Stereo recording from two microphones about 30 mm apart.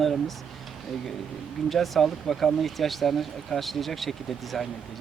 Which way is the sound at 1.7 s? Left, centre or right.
Centre.